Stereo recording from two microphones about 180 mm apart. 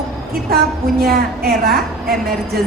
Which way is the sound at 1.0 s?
55° right (ahead or behind).